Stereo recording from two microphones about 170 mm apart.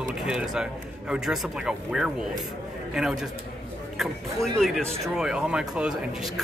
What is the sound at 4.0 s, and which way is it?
Speech, centre (ahead or behind).